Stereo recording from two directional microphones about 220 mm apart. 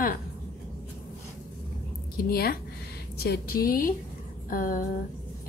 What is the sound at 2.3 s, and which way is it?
A woman's voice, 45° left (ahead or behind).